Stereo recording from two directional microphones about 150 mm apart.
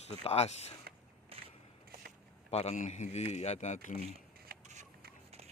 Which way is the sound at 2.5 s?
45° left (ahead or behind).